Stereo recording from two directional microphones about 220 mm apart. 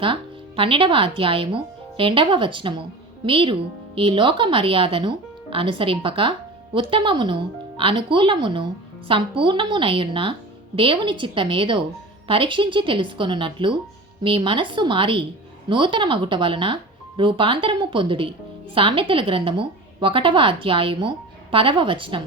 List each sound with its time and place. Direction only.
0.0 s speech: 25° right (ahead or behind)